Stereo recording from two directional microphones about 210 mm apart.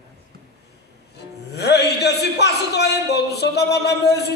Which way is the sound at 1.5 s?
50° left (ahead or behind).